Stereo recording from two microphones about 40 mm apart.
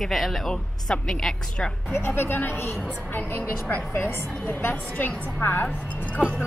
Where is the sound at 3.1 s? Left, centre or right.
Left.